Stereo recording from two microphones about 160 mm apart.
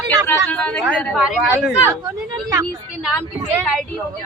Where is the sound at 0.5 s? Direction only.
5° left (ahead or behind).